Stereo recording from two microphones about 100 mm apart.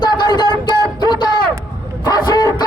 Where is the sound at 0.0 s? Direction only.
45° left (ahead or behind).